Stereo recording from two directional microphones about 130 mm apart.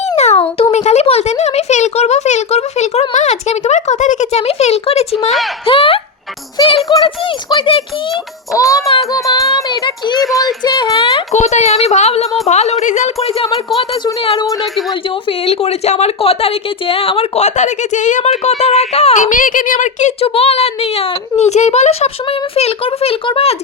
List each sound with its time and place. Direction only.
0.2 s a child's voice: 55° left (ahead or behind)
6.9 s child singing: 35° left (ahead or behind)
8.5 s speech: 25° left (ahead or behind)
9.3 s child singing: 25° left (ahead or behind)
10.2 s speech: centre (ahead or behind)
10.4 s speech: 30° left (ahead or behind)
11.3 s a child's voice: 60° left (ahead or behind)
14.0 s child singing: 35° left (ahead or behind)
14.4 s speech: centre (ahead or behind)
15.3 s a child's voice: 50° left (ahead or behind); by 20.1 s 70° left (ahead or behind)
20.2 s speech: 50° left (ahead or behind)